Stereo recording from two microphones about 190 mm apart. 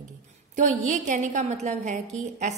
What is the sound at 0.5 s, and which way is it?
A woman's voice, 40° right (ahead or behind).